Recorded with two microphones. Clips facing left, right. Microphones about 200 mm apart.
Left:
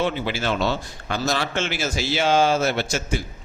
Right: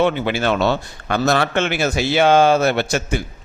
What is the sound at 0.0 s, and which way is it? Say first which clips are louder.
Speech: right 6 dB; 60° right (ahead or behind).